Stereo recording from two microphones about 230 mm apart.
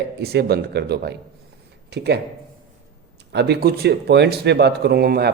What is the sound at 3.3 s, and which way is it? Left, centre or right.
Speech, right.